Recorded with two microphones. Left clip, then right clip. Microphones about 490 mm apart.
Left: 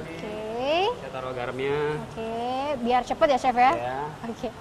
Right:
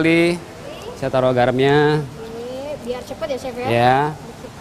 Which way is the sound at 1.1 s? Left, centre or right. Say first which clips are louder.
Right 15 dB; right.